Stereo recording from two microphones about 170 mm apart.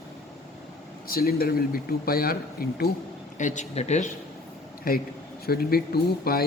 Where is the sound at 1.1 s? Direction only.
60° left (ahead or behind).